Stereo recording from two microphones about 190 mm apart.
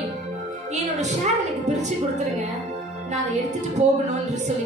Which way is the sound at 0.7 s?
35° right (ahead or behind).